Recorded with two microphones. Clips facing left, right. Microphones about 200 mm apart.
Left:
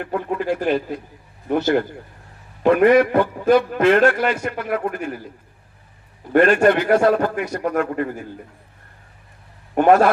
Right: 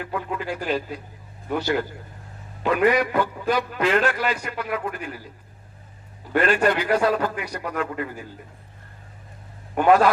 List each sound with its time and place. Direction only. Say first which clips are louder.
0.0 s a man's voice: left 5 dB; 50° left (ahead or behind)
6.3 s a man's voice: left 6 dB; 45° left (ahead or behind)
9.7 s a man's voice: left 3 dB; 45° left (ahead or behind)